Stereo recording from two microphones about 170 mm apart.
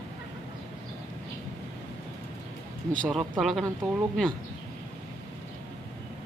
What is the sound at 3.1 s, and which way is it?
Speech, centre (ahead or behind).